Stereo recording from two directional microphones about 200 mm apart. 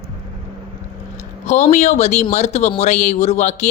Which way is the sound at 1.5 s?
35° left (ahead or behind).